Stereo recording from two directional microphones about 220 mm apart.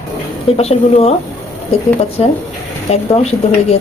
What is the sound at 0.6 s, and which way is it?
Speech, 30° left (ahead or behind).